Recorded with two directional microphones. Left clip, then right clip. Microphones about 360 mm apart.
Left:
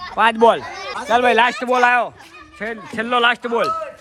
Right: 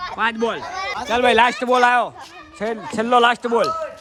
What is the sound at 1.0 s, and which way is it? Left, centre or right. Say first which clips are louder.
A man's voice: left 1 dB; centre.